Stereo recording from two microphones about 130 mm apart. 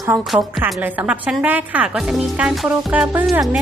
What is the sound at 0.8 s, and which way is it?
A woman's voice, 10° right (ahead or behind).